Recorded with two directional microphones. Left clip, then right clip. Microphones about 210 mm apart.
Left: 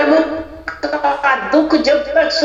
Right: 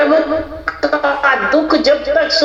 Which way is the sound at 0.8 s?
45° right (ahead or behind).